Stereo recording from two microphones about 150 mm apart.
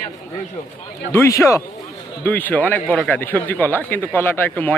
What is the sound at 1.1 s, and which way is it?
Speech, 20° left (ahead or behind).